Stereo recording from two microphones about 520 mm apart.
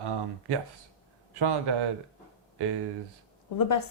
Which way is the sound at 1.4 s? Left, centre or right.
Right.